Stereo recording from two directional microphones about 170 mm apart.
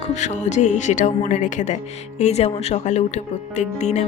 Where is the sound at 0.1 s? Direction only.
45° left (ahead or behind).